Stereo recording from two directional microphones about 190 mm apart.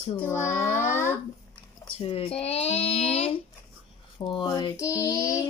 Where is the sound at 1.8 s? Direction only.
30° left (ahead or behind).